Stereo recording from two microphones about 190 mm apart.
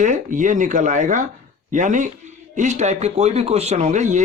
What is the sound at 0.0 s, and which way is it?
Speech, 40° right (ahead or behind).